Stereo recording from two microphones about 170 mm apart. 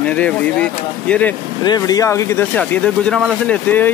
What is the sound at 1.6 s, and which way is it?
Speech, 25° left (ahead or behind).